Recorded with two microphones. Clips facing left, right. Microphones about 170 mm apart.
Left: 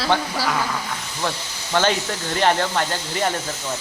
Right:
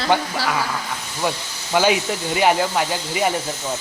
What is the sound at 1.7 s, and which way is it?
Speech, 10° right (ahead or behind).